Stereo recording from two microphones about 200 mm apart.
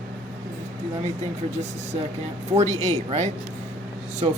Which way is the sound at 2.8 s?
35° right (ahead or behind).